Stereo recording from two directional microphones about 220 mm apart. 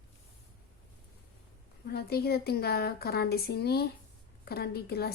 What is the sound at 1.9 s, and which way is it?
A woman's voice, 45° left (ahead or behind).